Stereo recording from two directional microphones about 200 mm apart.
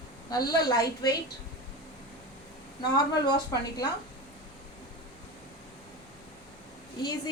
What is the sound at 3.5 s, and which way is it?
Speech, 20° left (ahead or behind).